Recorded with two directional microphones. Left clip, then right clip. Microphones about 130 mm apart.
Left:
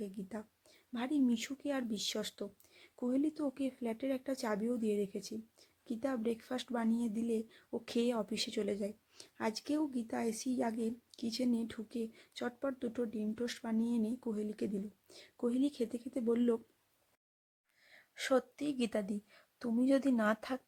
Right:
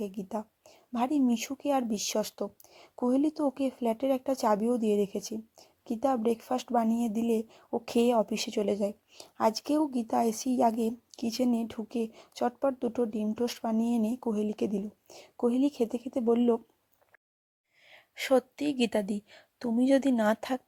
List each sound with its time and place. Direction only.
0.0 s a woman's voice: 25° right (ahead or behind)
17.8 s a woman's voice: 30° right (ahead or behind)